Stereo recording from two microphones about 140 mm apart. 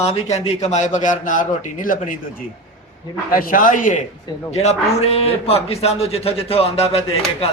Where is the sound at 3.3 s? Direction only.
90° left; by 4.0 s 65° left (ahead or behind).